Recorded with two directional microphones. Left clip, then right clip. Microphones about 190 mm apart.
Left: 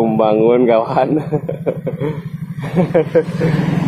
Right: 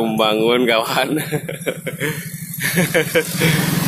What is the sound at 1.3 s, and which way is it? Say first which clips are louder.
Speech: left 4 dB; 40° right (ahead or behind).